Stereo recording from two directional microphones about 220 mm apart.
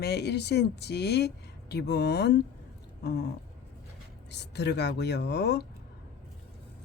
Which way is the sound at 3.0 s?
50° left (ahead or behind).